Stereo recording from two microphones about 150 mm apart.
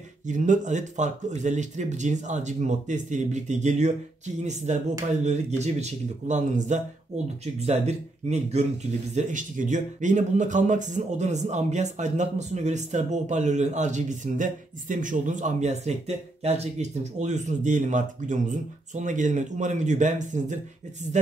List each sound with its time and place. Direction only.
0.3 s speech: 55° right (ahead or behind)
9.1 s speech: 60° right (ahead or behind)